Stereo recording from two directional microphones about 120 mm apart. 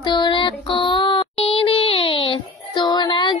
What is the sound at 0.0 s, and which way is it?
Music, 40° left (ahead or behind).